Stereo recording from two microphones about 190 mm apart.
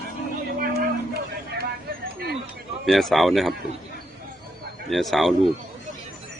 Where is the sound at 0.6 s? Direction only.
50° right (ahead or behind).